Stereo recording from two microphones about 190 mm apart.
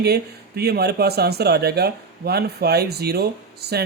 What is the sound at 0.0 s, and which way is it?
Speech, 55° right (ahead or behind).